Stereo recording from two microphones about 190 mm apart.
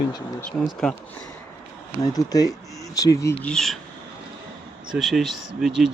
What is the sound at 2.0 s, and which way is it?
Speech, 20° left (ahead or behind).